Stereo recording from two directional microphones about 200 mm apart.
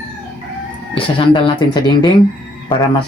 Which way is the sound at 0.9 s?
25° left (ahead or behind).